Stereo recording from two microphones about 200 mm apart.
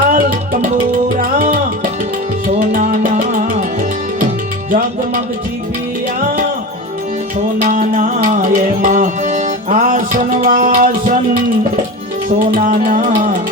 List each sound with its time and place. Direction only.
0.0 s music: 45° right (ahead or behind)
7.6 s music: 40° right (ahead or behind)
12.5 s music: 40° right (ahead or behind)